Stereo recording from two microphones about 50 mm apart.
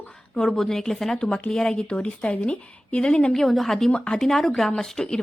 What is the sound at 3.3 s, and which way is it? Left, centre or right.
A woman's voice, centre.